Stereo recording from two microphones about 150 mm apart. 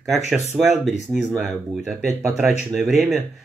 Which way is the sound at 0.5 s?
5° right (ahead or behind).